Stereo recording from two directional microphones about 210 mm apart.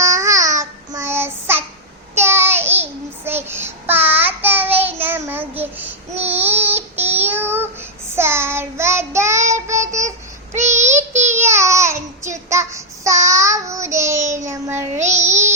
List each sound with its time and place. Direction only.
0.0 s child singing: 15° right (ahead or behind)
10.8 s child singing: 35° right (ahead or behind)
11.3 s child singing: 10° right (ahead or behind)
15.1 s music: 15° right (ahead or behind)